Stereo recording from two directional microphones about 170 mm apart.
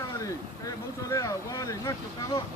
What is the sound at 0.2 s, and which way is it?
Speech, 20° left (ahead or behind).